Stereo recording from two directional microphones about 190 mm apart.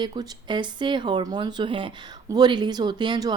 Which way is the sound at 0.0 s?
25° right (ahead or behind).